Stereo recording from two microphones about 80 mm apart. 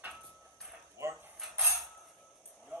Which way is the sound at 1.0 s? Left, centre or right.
Right.